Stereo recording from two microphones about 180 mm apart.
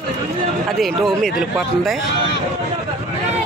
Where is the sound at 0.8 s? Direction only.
Centre (ahead or behind).